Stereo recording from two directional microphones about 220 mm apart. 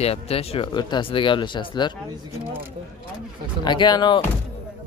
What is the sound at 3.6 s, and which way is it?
Speech, 20° left (ahead or behind).